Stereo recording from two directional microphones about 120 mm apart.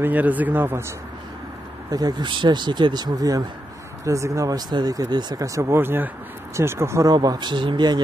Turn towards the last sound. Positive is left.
turn(degrees=-40)  # may be behind; listen again after turning